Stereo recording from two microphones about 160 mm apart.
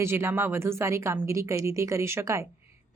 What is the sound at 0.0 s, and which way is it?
A woman's voice, 15° right (ahead or behind).